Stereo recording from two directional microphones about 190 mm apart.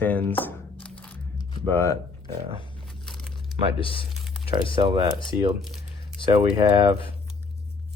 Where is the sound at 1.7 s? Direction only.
15° left (ahead or behind).